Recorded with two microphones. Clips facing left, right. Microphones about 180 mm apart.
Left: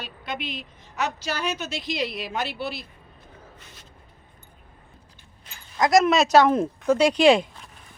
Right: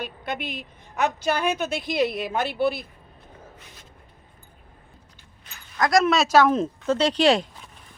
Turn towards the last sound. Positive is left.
turn(degrees=10)  # may be behind; listen again after turning